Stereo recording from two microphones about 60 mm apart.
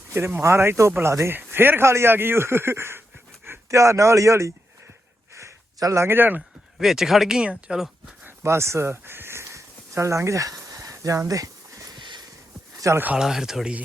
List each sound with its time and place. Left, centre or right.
0.4 s speech: right
3.7 s speech: right
5.8 s speech: right
6.1 s speech: right
6.7 s speech: centre
8.4 s a sound: right
13.1 s speech: centre